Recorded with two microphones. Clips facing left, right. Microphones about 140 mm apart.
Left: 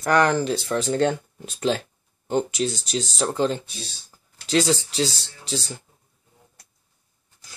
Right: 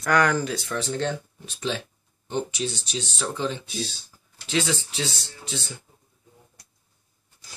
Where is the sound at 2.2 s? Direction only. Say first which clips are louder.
Left 5 dB; 45° left (ahead or behind).